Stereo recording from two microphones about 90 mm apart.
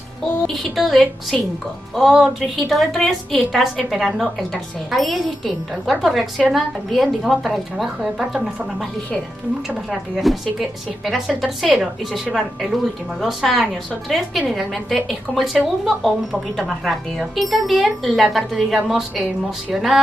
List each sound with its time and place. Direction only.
0.5 s a woman's voice: centre (ahead or behind)
9.8 s a woman's voice: centre (ahead or behind)